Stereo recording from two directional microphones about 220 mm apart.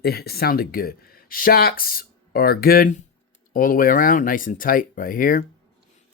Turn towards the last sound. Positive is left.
turn(degrees=40)  # may be behind; listen again after turning